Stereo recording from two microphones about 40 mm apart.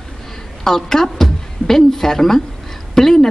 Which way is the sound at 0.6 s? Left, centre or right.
Centre.